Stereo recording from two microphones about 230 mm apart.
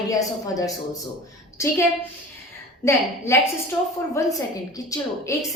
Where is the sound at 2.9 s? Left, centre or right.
Centre.